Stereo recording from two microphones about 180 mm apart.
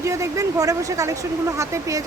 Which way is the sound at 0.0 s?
15° right (ahead or behind).